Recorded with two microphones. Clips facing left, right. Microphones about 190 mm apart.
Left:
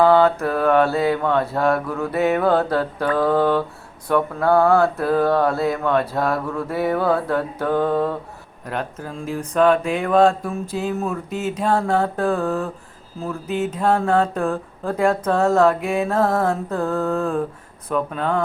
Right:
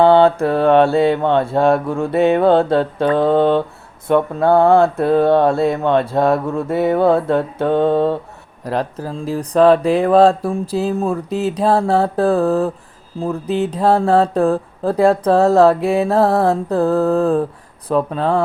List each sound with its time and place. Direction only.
0.0 s mantra: 30° right (ahead or behind)
8.6 s speech: 35° right (ahead or behind)